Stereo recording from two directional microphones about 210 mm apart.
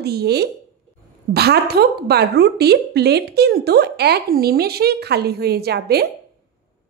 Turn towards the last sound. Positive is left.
turn(degrees=-50)  # may be behind; listen again after turning